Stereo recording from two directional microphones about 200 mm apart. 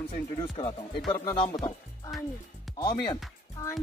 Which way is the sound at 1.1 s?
20° left (ahead or behind).